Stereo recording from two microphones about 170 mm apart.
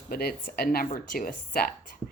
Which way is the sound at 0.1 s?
60° left (ahead or behind).